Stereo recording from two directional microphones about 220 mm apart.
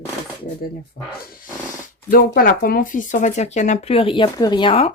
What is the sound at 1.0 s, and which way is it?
Speech, 45° left (ahead or behind).